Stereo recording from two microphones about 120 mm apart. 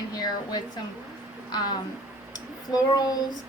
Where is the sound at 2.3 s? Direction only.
30° left (ahead or behind).